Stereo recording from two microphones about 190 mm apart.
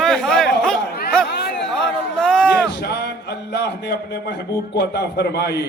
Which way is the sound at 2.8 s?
60° left (ahead or behind).